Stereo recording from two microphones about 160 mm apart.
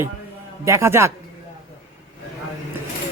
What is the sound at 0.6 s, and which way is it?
Speech, 15° right (ahead or behind).